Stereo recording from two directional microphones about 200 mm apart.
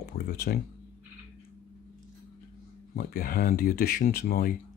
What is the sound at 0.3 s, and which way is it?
Speech, 50° left (ahead or behind).